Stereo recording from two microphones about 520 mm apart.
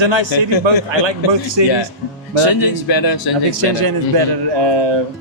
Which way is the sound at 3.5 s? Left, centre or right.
Right.